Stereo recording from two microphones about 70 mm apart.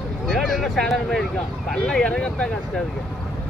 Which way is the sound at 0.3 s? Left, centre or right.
Centre.